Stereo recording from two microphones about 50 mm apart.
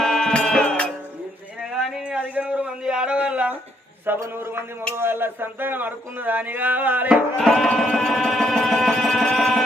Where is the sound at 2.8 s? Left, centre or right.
Centre.